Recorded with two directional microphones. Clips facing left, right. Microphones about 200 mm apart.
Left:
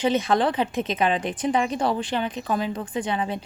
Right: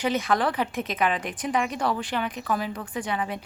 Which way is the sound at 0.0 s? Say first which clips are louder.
Left 3 dB; 25° left (ahead or behind).